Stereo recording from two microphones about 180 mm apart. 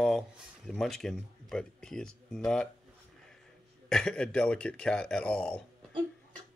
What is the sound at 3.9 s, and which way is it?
Speech, 5° left (ahead or behind).